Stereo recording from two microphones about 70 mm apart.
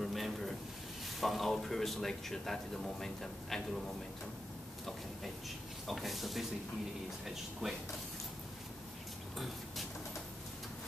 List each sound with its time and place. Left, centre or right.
0.0 s a sound: centre
1.2 s speech: centre
5.9 s speech: centre
7.6 s speech: centre